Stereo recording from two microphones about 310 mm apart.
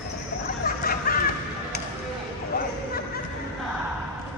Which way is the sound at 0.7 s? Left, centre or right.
Left.